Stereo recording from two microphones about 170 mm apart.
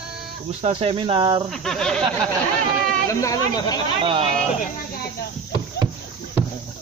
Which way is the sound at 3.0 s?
20° left (ahead or behind).